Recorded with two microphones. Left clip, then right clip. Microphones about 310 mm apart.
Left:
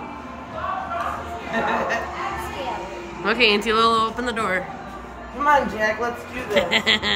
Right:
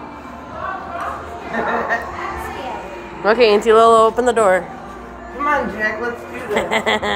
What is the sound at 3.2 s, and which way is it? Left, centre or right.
Speech, centre.